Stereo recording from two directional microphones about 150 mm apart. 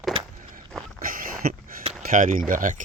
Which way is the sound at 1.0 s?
70° right (ahead or behind).